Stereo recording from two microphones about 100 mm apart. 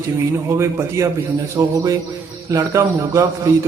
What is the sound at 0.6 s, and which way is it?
A man's voice, 30° right (ahead or behind).